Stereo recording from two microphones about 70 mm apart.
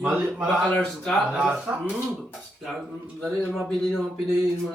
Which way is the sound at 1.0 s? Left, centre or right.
Centre.